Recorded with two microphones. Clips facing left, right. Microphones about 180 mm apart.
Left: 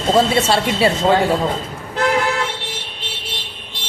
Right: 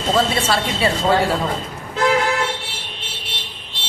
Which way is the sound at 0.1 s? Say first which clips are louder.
Left 4 dB; 25° left (ahead or behind).